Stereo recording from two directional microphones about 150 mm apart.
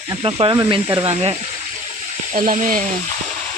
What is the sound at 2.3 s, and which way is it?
Speech, 60° right (ahead or behind).